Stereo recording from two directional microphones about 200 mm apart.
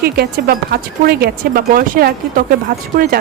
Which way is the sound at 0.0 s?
50° right (ahead or behind).